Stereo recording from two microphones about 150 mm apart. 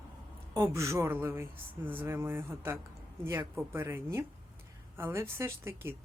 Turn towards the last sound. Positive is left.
turn(degrees=-15)  # may be behind; listen again after turning